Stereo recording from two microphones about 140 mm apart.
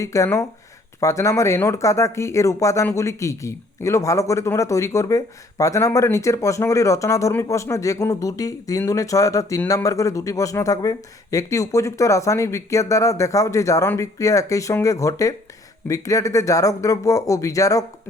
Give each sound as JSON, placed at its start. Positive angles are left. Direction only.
{"t": 0.0, "sound": "speech", "side_deg": 20}